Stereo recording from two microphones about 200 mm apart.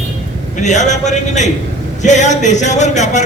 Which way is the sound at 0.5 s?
35° left (ahead or behind).